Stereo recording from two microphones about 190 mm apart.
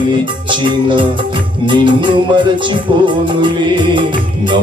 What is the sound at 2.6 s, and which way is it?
Music, 25° right (ahead or behind).